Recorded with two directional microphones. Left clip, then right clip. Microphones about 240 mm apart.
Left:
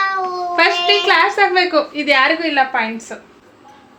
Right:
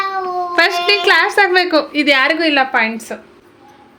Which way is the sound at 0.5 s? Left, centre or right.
Right.